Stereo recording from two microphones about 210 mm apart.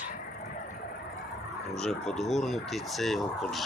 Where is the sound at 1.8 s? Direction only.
Centre (ahead or behind).